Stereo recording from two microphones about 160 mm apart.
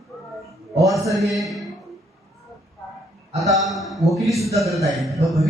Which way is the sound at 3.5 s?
Centre (ahead or behind).